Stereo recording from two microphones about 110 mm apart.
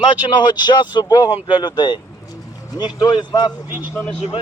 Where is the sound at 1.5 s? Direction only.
40° left (ahead or behind).